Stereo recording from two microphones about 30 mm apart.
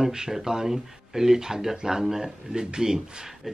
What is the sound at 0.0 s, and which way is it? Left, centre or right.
Speech, centre.